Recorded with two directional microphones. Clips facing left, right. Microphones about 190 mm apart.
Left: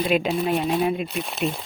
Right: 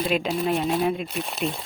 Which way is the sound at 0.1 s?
5° left (ahead or behind).